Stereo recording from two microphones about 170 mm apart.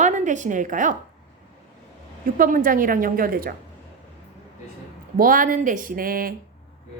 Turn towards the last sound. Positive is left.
turn(degrees=-60)  # may be behind; listen again after turning